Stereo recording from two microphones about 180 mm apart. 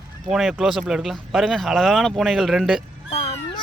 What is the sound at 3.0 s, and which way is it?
Cat, 30° left (ahead or behind).